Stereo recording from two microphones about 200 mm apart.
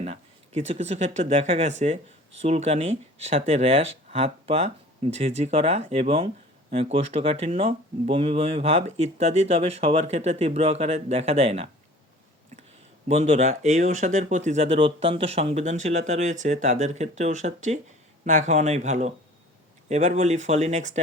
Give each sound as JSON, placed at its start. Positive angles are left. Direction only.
{"t": 0.0, "sound": "speech", "side_deg": -35}
{"t": 13.1, "sound": "speech", "side_deg": -35}